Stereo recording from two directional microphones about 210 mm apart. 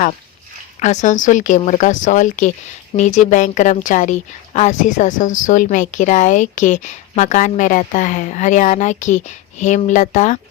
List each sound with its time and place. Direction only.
0.8 s a woman's voice: 35° left (ahead or behind)